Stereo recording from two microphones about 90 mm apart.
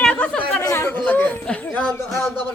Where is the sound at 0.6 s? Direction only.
30° left (ahead or behind); by 1.9 s 10° left (ahead or behind).